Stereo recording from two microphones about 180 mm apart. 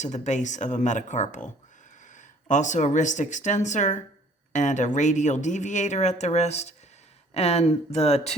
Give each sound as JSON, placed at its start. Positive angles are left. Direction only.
{"t": 0.0, "sound": "speech", "side_deg": 40}